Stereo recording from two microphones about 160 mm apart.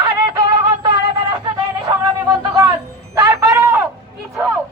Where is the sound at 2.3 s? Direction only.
20° right (ahead or behind).